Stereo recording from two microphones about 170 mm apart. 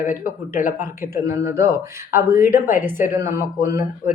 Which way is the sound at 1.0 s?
15° right (ahead or behind).